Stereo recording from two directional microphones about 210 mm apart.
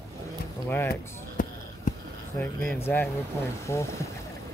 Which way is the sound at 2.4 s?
10° left (ahead or behind).